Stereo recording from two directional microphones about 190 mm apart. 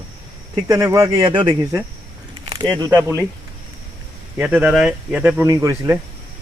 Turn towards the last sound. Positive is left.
turn(degrees=-15)  # may be behind; listen again after turning